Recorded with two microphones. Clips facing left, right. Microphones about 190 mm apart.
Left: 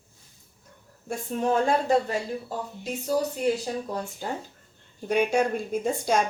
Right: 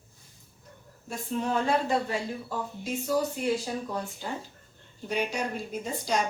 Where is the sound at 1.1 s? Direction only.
45° left (ahead or behind).